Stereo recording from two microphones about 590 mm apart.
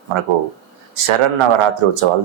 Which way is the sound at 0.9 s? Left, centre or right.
Right.